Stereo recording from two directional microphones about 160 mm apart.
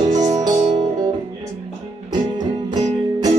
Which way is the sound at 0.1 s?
50° right (ahead or behind).